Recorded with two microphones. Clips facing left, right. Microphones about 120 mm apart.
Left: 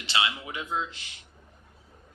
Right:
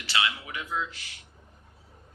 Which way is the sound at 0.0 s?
25° left (ahead or behind).